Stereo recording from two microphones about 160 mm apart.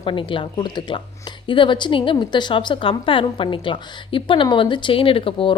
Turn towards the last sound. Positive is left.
turn(degrees=35)  # may be behind; listen again after turning